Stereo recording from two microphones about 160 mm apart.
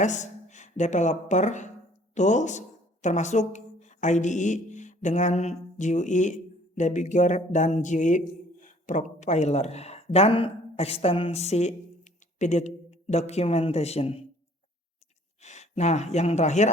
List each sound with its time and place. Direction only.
0.0 s a woman's voice: 50° left (ahead or behind)
15.4 s speech: 45° left (ahead or behind)